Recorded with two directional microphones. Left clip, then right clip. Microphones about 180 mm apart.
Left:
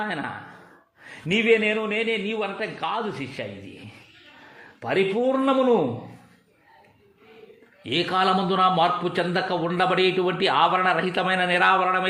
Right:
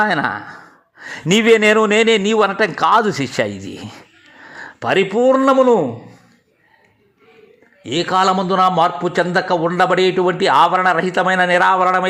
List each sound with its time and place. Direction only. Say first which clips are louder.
0.0 s a man's voice: right 13 dB; 30° right (ahead or behind); by 3.8 s 45° right (ahead or behind)
4.8 s speech: right 8 dB; 30° right (ahead or behind)
7.9 s a man's voice: right 7 dB; 15° right (ahead or behind)